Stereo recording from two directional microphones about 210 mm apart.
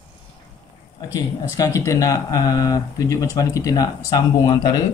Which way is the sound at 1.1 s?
15° left (ahead or behind).